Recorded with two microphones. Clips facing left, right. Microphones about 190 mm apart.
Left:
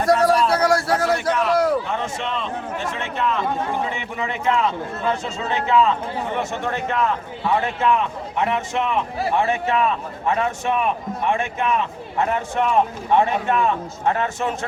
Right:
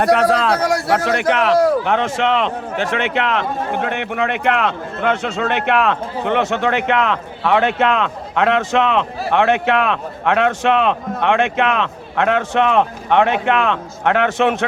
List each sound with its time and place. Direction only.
0.0 s a man's voice: 85° right